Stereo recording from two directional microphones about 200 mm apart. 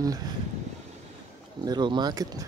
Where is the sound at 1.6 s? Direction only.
20° right (ahead or behind).